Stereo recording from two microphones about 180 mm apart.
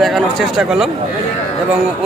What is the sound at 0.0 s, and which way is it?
Speech, centre (ahead or behind).